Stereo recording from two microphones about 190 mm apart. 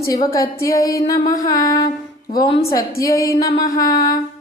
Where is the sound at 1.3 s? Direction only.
20° left (ahead or behind).